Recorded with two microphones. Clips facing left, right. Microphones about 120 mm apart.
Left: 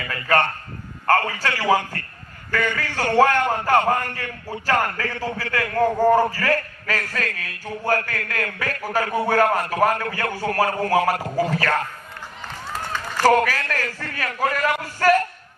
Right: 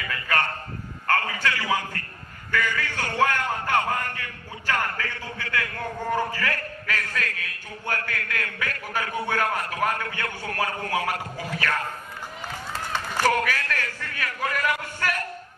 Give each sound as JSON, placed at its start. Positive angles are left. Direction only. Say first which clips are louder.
{"t": 0.0, "sound": "a sound", "louder": "left 6 dB", "side_deg": 40}
{"t": 1.0, "sound": "a man's voice", "louder": "left 5 dB", "side_deg": 40}
{"t": 13.2, "sound": "a man's voice", "louder": "left 6 dB", "side_deg": 40}